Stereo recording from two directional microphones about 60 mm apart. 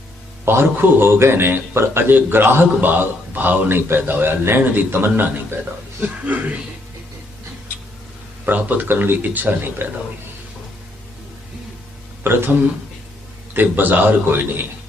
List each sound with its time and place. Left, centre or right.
0.4 s a man's voice: right
6.0 s speech: right
8.4 s a man's voice: right
12.2 s a man's voice: right